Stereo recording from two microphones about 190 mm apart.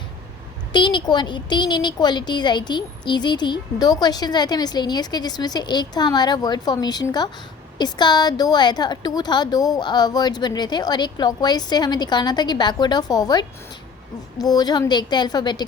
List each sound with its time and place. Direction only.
0.7 s a woman's voice: 25° left (ahead or behind)